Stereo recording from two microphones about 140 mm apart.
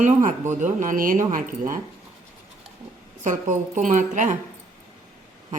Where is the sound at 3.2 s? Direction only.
65° right (ahead or behind).